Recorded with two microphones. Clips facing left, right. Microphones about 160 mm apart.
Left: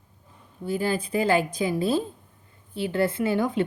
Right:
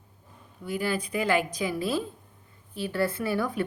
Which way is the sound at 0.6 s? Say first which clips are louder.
Left 3 dB; 30° left (ahead or behind).